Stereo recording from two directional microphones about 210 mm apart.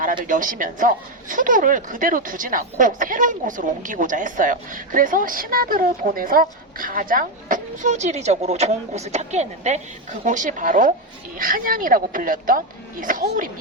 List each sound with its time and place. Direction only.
0.3 s speech: 40° right (ahead or behind)